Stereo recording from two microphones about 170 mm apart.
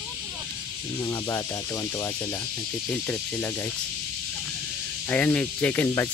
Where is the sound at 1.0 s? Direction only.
15° left (ahead or behind).